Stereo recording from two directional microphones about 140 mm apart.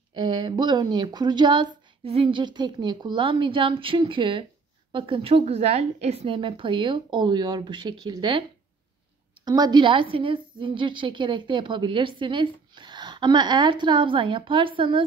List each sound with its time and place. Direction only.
0.1 s a woman's voice: 35° right (ahead or behind)